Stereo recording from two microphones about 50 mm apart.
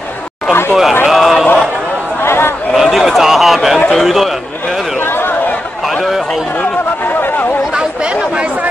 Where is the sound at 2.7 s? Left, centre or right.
Centre.